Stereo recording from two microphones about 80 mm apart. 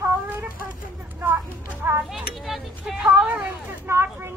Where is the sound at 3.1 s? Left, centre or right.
Centre.